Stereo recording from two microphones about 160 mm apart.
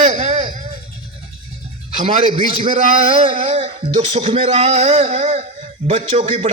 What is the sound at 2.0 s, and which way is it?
A man's voice, 35° right (ahead or behind).